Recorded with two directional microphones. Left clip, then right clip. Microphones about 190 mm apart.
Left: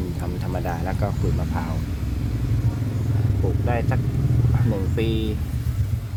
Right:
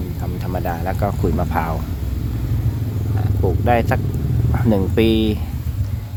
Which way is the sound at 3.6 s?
40° right (ahead or behind).